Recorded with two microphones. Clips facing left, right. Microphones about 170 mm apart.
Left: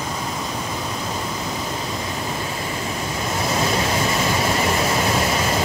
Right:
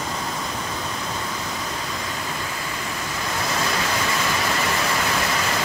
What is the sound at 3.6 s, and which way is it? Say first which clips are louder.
Vehicle: left 4 dB; 25° left (ahead or behind).